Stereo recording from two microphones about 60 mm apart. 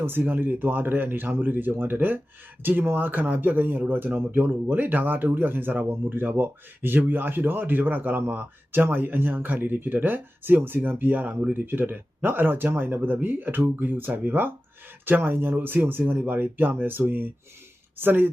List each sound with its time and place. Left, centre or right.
0.0 s speech: right